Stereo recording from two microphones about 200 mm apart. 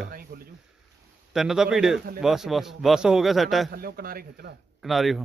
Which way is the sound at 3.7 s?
50° right (ahead or behind).